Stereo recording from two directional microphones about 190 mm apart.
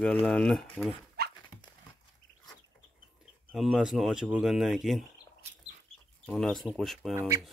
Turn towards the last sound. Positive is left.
turn(degrees=-15)  # may be behind; listen again after turning